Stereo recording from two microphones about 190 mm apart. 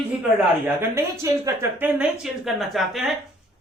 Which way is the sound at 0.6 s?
10° right (ahead or behind).